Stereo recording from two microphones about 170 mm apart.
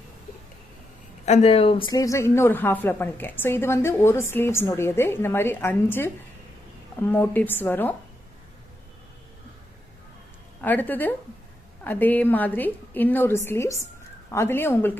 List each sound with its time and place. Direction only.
1.2 s speech: 40° left (ahead or behind)
1.9 s a woman's voice: 20° left (ahead or behind)
10.6 s a woman's voice: 10° left (ahead or behind)